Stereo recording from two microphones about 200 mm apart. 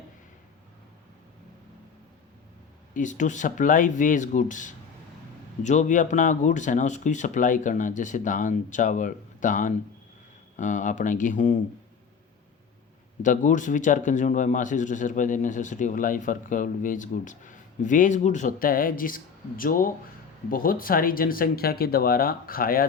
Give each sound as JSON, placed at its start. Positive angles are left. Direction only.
{"t": 2.9, "sound": "speech", "side_deg": 40}
{"t": 13.2, "sound": "speech", "side_deg": 40}